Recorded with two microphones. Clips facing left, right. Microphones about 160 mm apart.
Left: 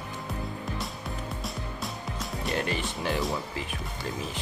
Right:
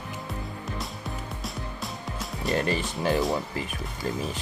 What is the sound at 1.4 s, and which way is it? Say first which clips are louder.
Music: even; centre (ahead or behind).